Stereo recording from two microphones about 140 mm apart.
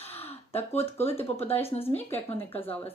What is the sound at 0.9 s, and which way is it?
Speech, 15° left (ahead or behind).